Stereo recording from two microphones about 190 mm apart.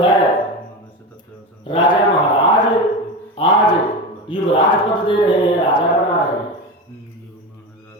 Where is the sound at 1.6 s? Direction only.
25° left (ahead or behind).